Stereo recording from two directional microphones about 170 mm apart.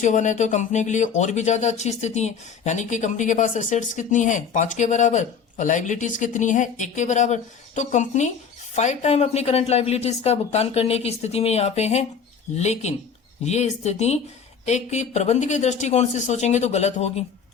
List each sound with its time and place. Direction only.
0.0 s speech: 45° left (ahead or behind)